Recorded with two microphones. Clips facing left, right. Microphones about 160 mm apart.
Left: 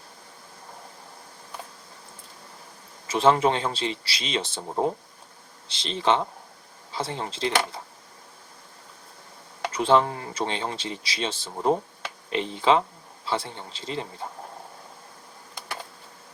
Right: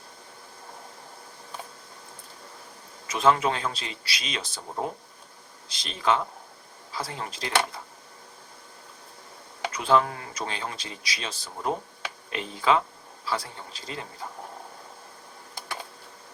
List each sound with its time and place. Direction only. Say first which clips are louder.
3.1 s speech: left 3 dB; 30° left (ahead or behind)
9.7 s speech: left 2 dB; 25° left (ahead or behind)